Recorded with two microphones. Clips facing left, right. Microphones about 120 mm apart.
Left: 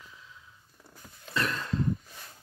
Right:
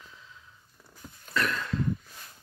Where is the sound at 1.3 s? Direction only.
25° left (ahead or behind).